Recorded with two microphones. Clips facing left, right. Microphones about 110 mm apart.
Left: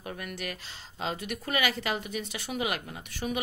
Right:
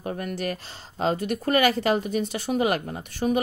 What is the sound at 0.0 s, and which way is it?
Speech, 35° right (ahead or behind).